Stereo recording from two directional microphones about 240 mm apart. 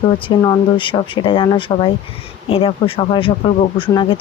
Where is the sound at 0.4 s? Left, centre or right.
Centre.